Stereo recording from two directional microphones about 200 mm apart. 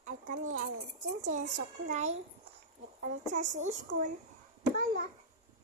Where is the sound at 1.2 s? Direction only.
35° right (ahead or behind).